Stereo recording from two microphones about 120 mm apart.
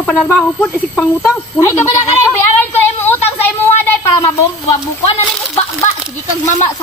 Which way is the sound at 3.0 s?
15° left (ahead or behind).